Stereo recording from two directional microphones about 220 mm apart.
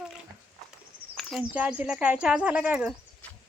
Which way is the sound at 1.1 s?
Centre (ahead or behind).